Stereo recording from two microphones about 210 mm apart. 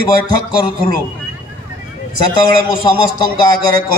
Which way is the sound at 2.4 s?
20° left (ahead or behind).